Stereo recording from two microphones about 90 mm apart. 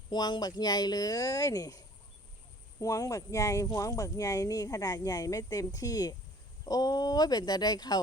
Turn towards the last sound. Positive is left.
turn(degrees=50)  # may be behind; listen again after turning